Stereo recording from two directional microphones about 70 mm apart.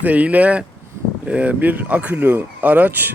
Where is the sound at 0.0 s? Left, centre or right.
Right.